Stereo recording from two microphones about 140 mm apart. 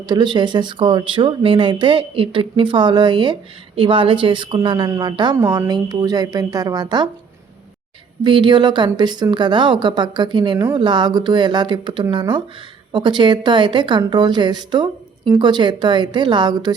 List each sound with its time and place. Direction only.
0.0 s a woman's voice: 30° right (ahead or behind)
8.2 s a woman's voice: 35° right (ahead or behind)